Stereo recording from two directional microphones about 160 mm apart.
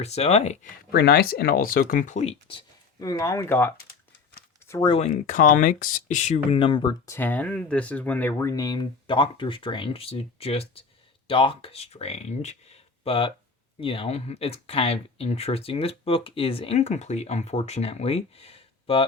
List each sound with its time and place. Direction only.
0.0 s speech: 40° left (ahead or behind)
0.9 s speech: 85° left; by 3.8 s 15° left (ahead or behind)
4.7 s speech: 25° left (ahead or behind)
4.9 s speech: 45° left (ahead or behind)
7.0 s speech: 15° left (ahead or behind); by 19.0 s 35° left (ahead or behind)